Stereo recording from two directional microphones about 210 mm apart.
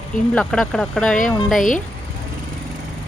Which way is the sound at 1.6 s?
40° left (ahead or behind).